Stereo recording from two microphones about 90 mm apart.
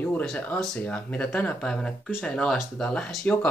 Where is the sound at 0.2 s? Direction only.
10° left (ahead or behind).